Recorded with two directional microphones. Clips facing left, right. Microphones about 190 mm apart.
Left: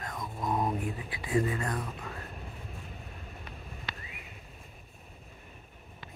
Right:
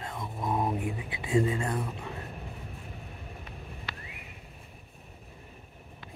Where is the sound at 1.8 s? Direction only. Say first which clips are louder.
Right 3 dB; 20° right (ahead or behind).